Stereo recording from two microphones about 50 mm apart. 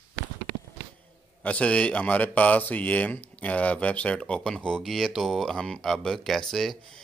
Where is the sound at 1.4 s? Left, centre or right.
Left.